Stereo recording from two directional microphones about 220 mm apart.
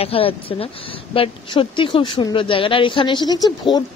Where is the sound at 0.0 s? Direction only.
25° left (ahead or behind).